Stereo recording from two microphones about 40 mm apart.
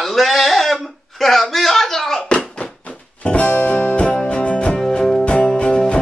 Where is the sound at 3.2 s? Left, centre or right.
Left.